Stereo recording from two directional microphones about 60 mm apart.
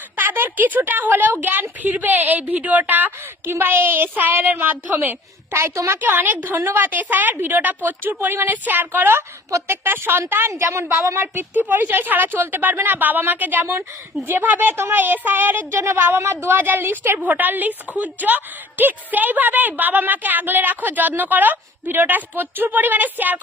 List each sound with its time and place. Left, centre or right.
0.2 s a woman's voice: right
5.5 s a woman's voice: right
6.0 s a woman's voice: right
9.5 s a woman's voice: right
9.8 s a woman's voice: right